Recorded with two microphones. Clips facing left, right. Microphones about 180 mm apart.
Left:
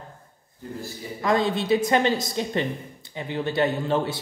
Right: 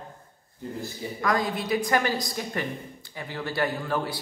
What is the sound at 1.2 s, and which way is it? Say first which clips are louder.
A woman's voice: left 4 dB; 25° left (ahead or behind).